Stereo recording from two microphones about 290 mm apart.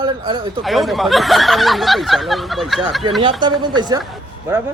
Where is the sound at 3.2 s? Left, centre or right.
Centre.